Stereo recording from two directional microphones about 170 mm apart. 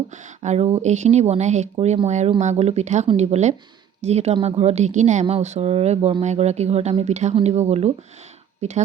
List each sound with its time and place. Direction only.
0.4 s speech: 40° right (ahead or behind)